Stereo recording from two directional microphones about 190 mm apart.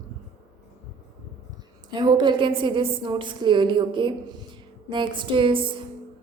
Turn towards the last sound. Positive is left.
turn(degrees=-25)  # may be behind; listen again after turning